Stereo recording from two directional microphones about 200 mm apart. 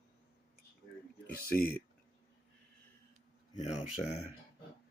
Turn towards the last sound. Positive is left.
turn(degrees=35)  # may be behind; listen again after turning